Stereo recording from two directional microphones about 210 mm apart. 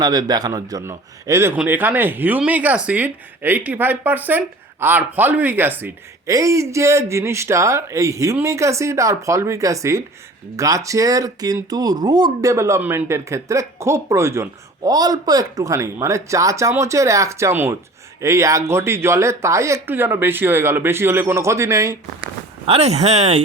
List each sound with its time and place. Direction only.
0.0 s a man's voice: 20° right (ahead or behind)
22.6 s speech: 30° right (ahead or behind)